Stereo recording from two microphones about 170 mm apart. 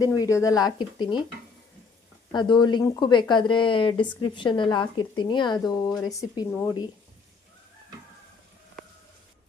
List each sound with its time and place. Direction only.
0.0 s speech: 20° left (ahead or behind)
2.3 s speech: 25° left (ahead or behind)